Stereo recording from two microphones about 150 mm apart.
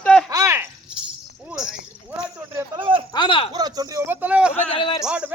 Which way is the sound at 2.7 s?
35° right (ahead or behind).